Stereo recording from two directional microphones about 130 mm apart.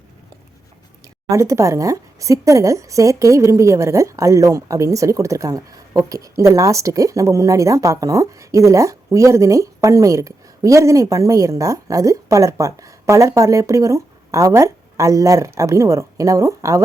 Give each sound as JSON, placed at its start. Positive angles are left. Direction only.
{"t": 1.0, "sound": "a woman's voice", "side_deg": -25}